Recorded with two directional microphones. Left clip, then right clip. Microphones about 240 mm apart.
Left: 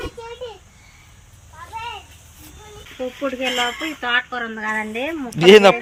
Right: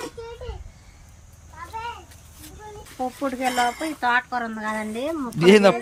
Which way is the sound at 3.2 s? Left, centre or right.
Centre.